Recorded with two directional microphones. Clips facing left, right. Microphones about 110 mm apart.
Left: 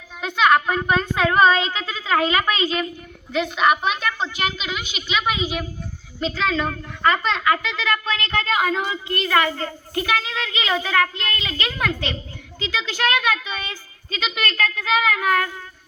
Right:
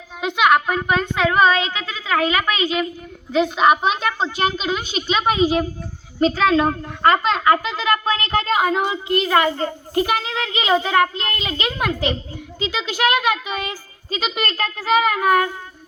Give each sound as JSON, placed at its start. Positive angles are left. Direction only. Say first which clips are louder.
{"t": 0.3, "sound": "a woman's voice", "louder": "right 1 dB", "side_deg": -5}
{"t": 3.3, "sound": "a child's voice", "louder": "right 3 dB", "side_deg": -20}